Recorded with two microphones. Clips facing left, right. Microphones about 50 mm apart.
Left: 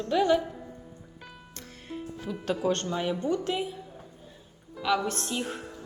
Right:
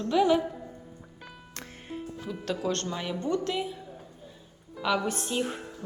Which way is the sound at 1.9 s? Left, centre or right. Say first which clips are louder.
Left 1 dB; centre.